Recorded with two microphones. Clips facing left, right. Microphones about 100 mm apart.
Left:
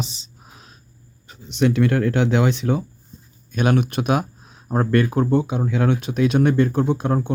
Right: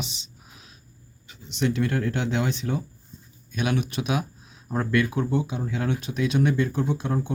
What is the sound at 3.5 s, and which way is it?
Speech, 50° left (ahead or behind).